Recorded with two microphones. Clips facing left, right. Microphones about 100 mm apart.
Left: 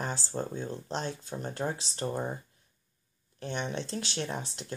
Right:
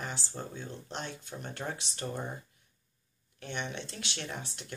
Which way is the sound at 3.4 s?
35° left (ahead or behind).